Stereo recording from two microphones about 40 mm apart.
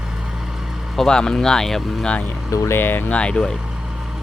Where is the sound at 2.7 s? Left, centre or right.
Left.